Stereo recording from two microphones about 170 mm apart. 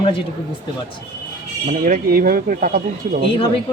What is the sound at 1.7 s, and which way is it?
Speech, 55° right (ahead or behind).